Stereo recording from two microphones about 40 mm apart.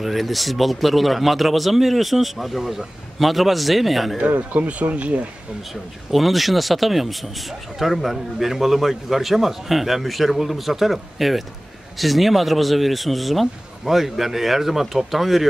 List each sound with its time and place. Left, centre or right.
0.0 s a man's voice: centre
4.3 s speech: right
6.1 s a man's voice: centre